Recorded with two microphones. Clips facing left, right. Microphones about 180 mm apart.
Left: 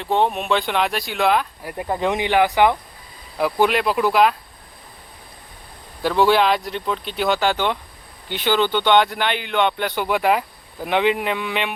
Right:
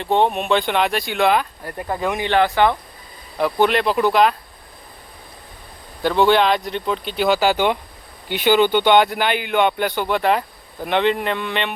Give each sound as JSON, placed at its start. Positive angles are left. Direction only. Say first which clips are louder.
{"t": 0.0, "sound": "speech", "louder": "right 2 dB", "side_deg": 0}
{"t": 1.7, "sound": "speech", "louder": "left 1 dB", "side_deg": 15}
{"t": 6.0, "sound": "speech", "louder": "right 1 dB", "side_deg": 5}